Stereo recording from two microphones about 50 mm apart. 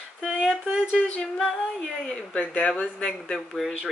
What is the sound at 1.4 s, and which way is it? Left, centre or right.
Speech, centre.